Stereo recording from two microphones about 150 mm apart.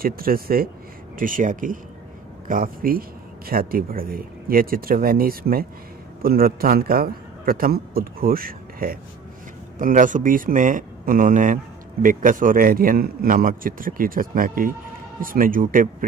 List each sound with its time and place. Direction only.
0.0 s speech: 75° right (ahead or behind)
1.1 s speech: 65° right (ahead or behind)
9.8 s speech: 60° right (ahead or behind)